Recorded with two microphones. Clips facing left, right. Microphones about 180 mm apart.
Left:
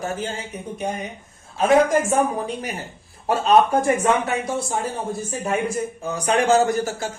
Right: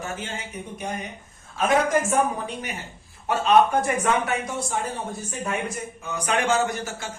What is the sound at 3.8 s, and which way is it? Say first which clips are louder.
Speech: left 4 dB; 30° left (ahead or behind).